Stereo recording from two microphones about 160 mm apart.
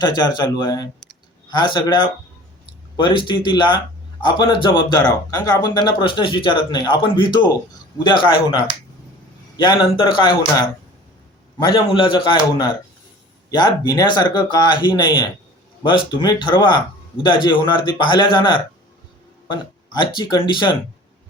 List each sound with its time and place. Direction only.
0.0 s speech: 25° left (ahead or behind)
11.6 s speech: 30° left (ahead or behind)